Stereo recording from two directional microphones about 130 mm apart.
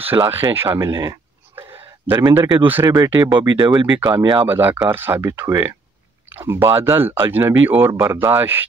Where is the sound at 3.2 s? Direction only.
35° right (ahead or behind).